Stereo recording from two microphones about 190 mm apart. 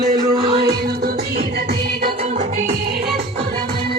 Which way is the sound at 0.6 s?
55° right (ahead or behind).